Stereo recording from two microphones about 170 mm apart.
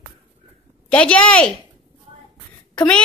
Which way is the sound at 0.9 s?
5° left (ahead or behind).